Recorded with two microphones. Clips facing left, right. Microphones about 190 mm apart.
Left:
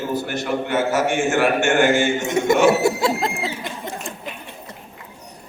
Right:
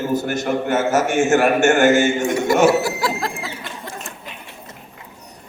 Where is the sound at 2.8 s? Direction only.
25° left (ahead or behind).